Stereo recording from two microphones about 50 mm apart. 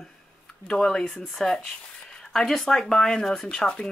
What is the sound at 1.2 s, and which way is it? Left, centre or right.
Speech, centre.